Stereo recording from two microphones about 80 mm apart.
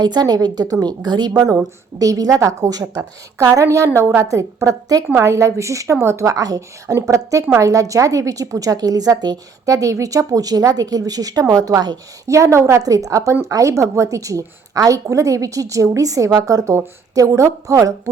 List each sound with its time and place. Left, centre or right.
0.0 s a woman's voice: right
2.0 s a woman's voice: right
12.3 s a woman's voice: right